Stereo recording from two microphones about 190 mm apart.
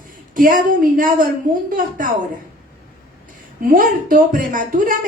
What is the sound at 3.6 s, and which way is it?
A woman's voice, 45° right (ahead or behind).